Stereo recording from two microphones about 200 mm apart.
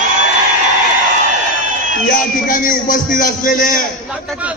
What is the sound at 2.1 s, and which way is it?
A man's voice, 45° left (ahead or behind).